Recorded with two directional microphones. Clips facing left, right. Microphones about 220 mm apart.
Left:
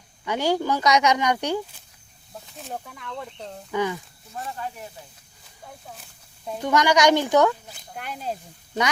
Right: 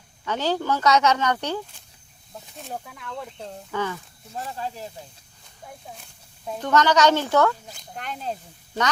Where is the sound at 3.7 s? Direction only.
15° left (ahead or behind).